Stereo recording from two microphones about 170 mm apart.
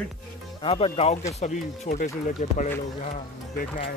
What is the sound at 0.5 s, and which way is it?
Speech, 35° left (ahead or behind).